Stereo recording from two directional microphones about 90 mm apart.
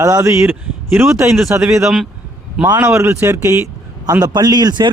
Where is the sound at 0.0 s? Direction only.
35° right (ahead or behind).